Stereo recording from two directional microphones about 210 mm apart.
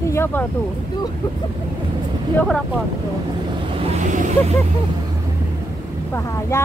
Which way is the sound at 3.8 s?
35° right (ahead or behind).